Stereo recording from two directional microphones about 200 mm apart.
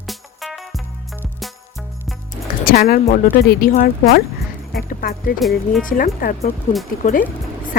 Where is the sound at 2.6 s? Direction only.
50° left (ahead or behind).